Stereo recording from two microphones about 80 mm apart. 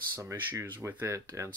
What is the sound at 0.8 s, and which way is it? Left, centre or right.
Speech, right.